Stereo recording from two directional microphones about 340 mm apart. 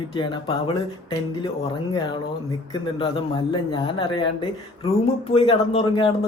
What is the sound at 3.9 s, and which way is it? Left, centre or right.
Speech, centre.